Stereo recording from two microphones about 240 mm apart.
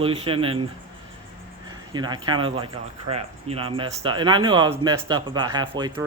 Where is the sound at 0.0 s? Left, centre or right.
Right.